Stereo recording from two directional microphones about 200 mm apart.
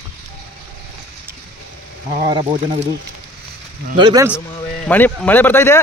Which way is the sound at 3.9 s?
20° right (ahead or behind).